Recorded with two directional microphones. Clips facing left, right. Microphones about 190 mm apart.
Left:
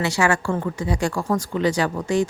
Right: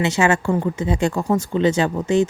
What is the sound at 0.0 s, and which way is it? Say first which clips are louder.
Speech: right 3 dB; 20° right (ahead or behind).